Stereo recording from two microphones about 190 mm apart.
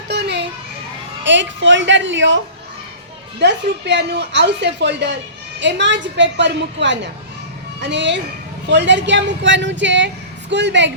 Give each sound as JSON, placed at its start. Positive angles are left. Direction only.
{"t": 0.1, "sound": "children playing", "side_deg": -65}
{"t": 1.2, "sound": "speech", "side_deg": -70}
{"t": 3.3, "sound": "a woman's voice", "side_deg": -65}